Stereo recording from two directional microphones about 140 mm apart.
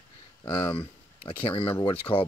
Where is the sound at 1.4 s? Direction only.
35° left (ahead or behind).